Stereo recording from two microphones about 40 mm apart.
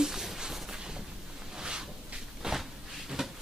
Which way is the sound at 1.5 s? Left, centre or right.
Centre.